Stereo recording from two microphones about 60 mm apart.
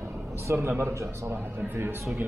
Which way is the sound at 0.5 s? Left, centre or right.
Right.